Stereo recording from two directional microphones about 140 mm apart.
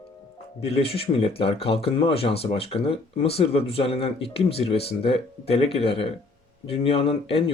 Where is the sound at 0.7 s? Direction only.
45° left (ahead or behind).